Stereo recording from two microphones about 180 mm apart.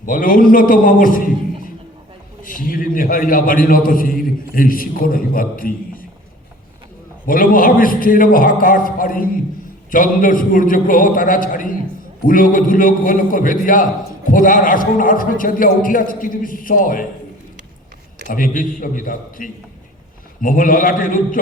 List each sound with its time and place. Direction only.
0.0 s a man's voice: 50° left (ahead or behind)
2.4 s a man's voice: 50° left (ahead or behind)
7.3 s a man's voice: 50° left (ahead or behind)
18.3 s a man's voice: 50° left (ahead or behind)